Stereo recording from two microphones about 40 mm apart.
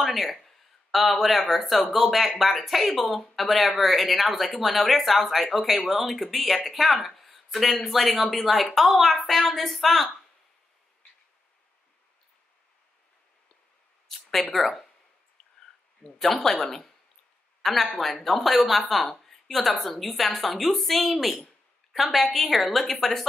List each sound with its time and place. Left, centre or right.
0.0 s speech: centre
7.1 s a sound: centre
7.9 s speech: centre
14.0 s a sound: centre
16.0 s speech: right
16.6 s speech: centre